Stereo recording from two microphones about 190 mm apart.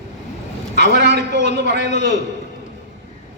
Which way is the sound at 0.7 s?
60° right (ahead or behind).